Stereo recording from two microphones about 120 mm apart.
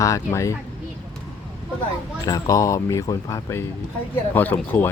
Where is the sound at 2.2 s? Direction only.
30° left (ahead or behind).